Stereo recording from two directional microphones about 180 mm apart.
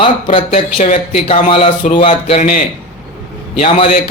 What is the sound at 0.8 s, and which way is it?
Speech, 45° left (ahead or behind).